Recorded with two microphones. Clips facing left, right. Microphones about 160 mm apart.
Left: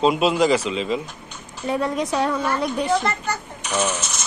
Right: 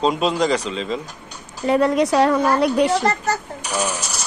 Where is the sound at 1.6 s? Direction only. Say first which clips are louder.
Right 6 dB; 75° right (ahead or behind).